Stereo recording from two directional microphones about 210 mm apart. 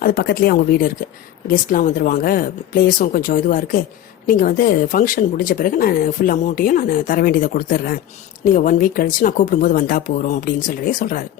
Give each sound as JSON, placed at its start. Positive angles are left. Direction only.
{"t": 0.0, "sound": "speech", "side_deg": 45}